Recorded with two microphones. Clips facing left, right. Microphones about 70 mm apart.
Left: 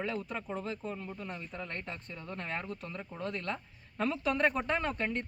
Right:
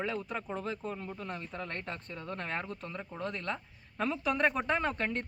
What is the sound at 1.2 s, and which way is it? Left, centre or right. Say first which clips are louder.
Speech: right 2 dB; right.